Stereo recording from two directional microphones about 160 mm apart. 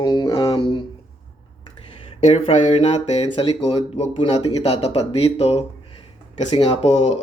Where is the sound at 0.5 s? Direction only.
35° left (ahead or behind).